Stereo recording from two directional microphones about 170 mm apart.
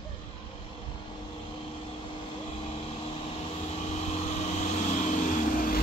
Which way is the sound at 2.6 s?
35° left (ahead or behind).